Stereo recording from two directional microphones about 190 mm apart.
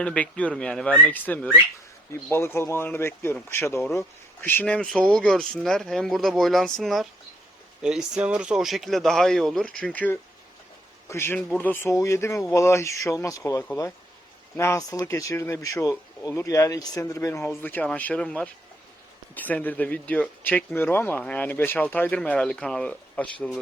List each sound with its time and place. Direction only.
0.0 s speech: 5° left (ahead or behind)